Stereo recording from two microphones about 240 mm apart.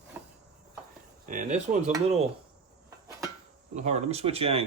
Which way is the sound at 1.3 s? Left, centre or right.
Right.